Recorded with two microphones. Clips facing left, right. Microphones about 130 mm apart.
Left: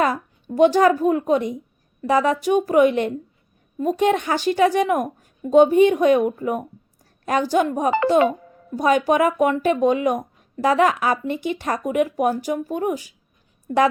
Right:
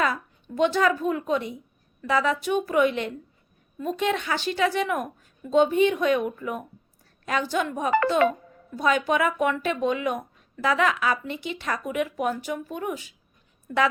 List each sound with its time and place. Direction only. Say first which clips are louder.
0.0 s a woman's voice: left 5 dB; 40° left (ahead or behind)